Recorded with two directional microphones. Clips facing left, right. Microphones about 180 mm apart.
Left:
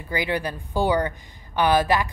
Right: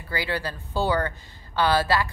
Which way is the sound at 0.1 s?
15° left (ahead or behind).